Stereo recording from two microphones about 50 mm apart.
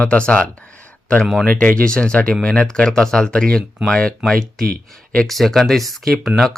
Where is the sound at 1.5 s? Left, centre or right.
Left.